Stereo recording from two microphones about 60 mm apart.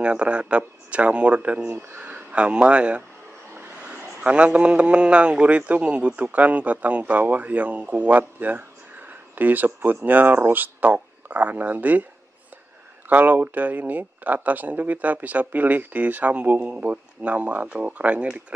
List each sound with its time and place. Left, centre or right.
0.0 s a man's voice: centre
13.1 s speech: right